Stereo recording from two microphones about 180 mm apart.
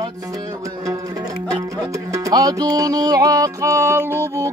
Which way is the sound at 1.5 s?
20° right (ahead or behind).